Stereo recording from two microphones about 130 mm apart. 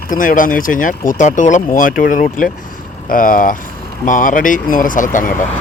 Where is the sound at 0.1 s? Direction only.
90° left.